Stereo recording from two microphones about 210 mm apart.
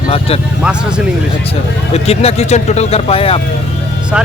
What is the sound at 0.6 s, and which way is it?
Speech, 5° right (ahead or behind).